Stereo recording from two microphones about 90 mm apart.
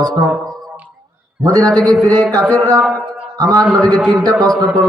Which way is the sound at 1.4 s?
45° right (ahead or behind).